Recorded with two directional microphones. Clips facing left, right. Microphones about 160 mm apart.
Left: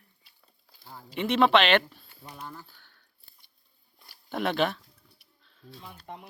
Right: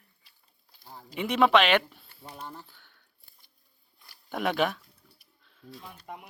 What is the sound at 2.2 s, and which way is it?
Speech, 25° right (ahead or behind).